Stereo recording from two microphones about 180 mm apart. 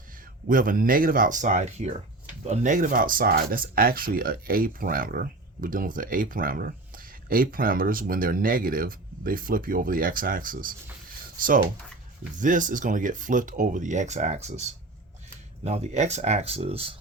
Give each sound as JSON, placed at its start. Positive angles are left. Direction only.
{"t": 0.4, "sound": "speech", "side_deg": -50}
{"t": 12.4, "sound": "speech", "side_deg": -45}
{"t": 15.6, "sound": "speech", "side_deg": -35}